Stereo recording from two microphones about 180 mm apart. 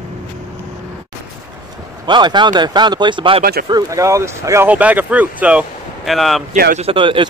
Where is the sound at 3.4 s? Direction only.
55° right (ahead or behind).